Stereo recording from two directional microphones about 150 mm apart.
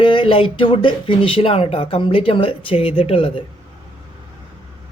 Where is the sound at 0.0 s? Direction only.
35° left (ahead or behind).